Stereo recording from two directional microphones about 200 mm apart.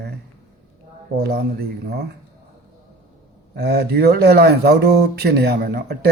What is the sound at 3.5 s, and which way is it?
Speech, 55° right (ahead or behind).